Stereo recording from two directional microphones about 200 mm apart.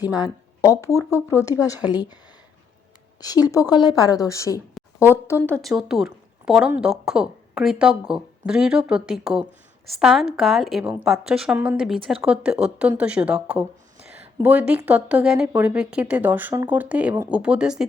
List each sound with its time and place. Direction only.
0.0 s speech: 20° left (ahead or behind)
3.2 s speech: 20° left (ahead or behind)
5.5 s speech: centre (ahead or behind)